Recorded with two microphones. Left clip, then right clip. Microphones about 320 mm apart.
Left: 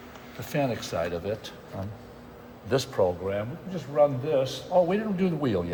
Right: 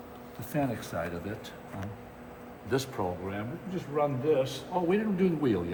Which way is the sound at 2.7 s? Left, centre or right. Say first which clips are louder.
Left 4 dB; left.